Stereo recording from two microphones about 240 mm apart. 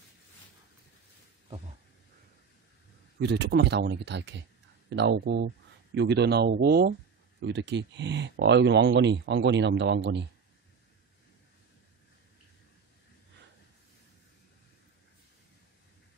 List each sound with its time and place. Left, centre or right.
3.2 s speech: right